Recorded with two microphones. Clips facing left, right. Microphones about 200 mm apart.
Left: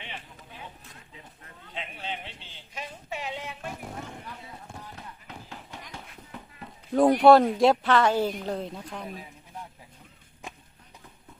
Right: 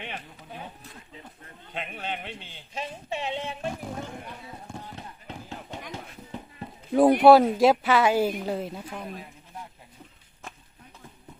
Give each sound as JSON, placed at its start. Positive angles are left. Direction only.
{"t": 0.0, "sound": "a sound", "side_deg": -50}
{"t": 1.7, "sound": "a man's voice", "side_deg": -55}
{"t": 2.7, "sound": "child singing", "side_deg": -25}
{"t": 6.9, "sound": "speech", "side_deg": -5}
{"t": 10.4, "sound": "chop", "side_deg": 15}